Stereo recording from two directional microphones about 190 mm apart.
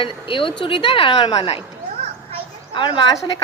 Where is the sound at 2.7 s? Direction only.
25° left (ahead or behind).